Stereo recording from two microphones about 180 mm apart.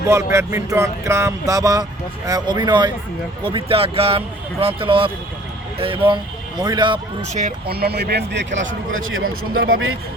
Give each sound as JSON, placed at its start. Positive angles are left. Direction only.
{"t": 0.1, "sound": "speech", "side_deg": -15}
{"t": 7.2, "sound": "speech", "side_deg": -45}